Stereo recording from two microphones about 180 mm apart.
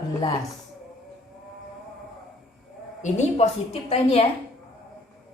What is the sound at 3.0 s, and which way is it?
A woman's voice, 40° left (ahead or behind).